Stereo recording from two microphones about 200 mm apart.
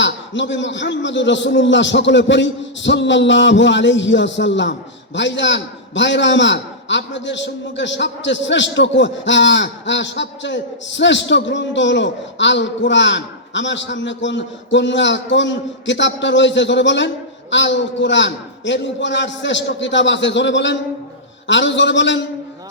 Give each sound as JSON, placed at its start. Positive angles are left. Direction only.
{"t": 0.0, "sound": "a man's voice", "side_deg": 65}